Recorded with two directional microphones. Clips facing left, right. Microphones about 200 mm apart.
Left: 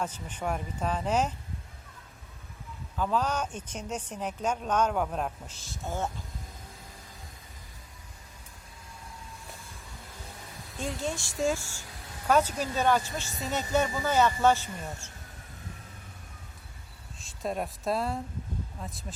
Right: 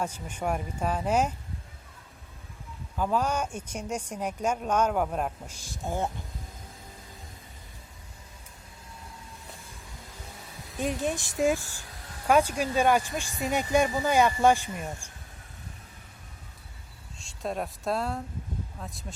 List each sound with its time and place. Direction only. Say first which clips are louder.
0.0 s speech: right 2 dB; 10° right (ahead or behind)
3.0 s speech: right 2 dB; 10° right (ahead or behind)
10.8 s speech: right 4 dB; 15° right (ahead or behind)
17.2 s speech: even; centre (ahead or behind)